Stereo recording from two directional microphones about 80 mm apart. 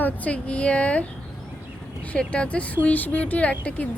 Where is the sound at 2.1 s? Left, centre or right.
Centre.